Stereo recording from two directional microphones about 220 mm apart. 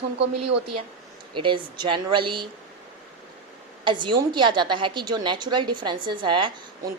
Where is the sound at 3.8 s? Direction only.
20° right (ahead or behind).